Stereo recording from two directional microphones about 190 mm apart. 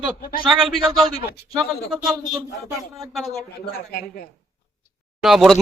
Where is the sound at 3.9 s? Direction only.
55° left (ahead or behind).